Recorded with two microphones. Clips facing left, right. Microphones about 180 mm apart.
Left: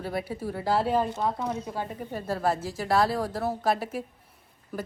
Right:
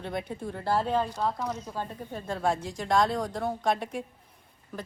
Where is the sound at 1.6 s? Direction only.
10° left (ahead or behind).